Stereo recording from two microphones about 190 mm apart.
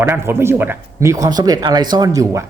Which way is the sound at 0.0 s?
15° right (ahead or behind).